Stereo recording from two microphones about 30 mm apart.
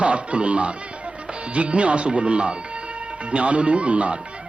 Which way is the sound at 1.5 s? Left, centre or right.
Right.